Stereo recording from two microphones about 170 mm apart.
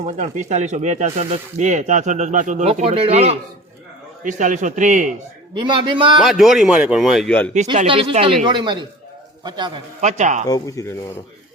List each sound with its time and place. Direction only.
0.0 s speech: 45° right (ahead or behind)
5.5 s a man's voice: 30° right (ahead or behind)
6.2 s a man's voice: centre (ahead or behind)
7.9 s a man's voice: 35° right (ahead or behind)
10.0 s speech: 45° right (ahead or behind)
10.4 s speech: 20° left (ahead or behind)